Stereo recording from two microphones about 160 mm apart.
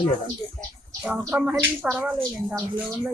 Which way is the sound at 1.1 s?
10° right (ahead or behind).